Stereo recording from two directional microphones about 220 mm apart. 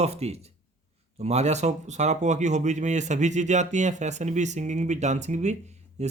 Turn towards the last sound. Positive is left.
turn(degrees=-30)  # may be behind; listen again after turning